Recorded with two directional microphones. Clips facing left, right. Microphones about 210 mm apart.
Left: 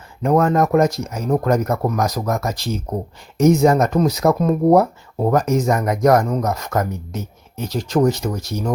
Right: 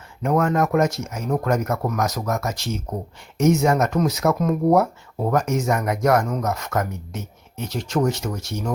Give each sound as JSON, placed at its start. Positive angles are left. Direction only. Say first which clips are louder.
{"t": 0.2, "sound": "speech", "louder": "left 4 dB", "side_deg": 35}